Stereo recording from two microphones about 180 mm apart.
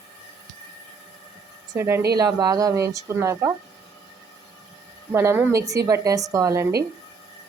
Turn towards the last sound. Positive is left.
turn(degrees=-15)  # may be behind; listen again after turning